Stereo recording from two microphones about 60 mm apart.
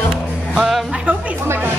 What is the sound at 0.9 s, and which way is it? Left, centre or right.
Speech, right.